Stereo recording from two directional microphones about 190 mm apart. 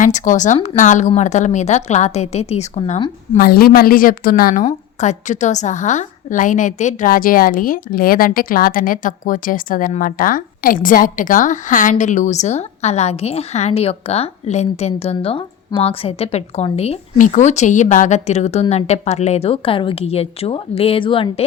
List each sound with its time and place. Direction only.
0.0 s a woman's voice: 40° left (ahead or behind)
3.3 s a woman's voice: 50° left (ahead or behind); by 21.4 s 25° left (ahead or behind)